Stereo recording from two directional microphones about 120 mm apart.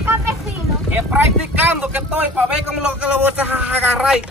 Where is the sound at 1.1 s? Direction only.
15° right (ahead or behind).